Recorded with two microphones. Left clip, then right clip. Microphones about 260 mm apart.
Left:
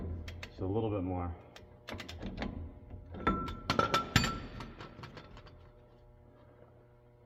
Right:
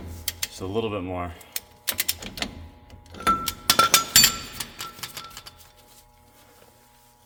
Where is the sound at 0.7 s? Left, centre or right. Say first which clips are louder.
Right 7 dB; right.